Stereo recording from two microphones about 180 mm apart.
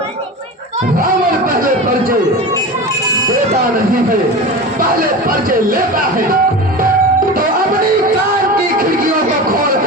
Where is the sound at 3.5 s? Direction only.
50° right (ahead or behind).